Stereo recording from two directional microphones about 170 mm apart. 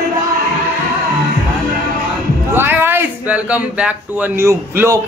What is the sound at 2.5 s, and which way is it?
A man's voice, 15° right (ahead or behind).